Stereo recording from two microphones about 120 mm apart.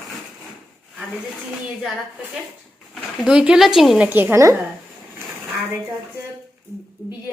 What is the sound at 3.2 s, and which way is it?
Speech, 5° right (ahead or behind).